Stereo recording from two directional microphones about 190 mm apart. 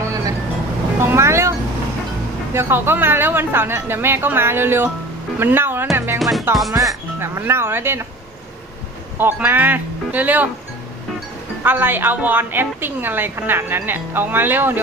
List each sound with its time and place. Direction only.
0.0 s vehicle: 15° right (ahead or behind)
0.9 s a woman's voice: 15° right (ahead or behind)
6.1 s music: centre (ahead or behind)
6.7 s a woman's voice: 20° right (ahead or behind)
9.1 s a woman's voice: 10° right (ahead or behind)
11.6 s a woman's voice: 10° right (ahead or behind)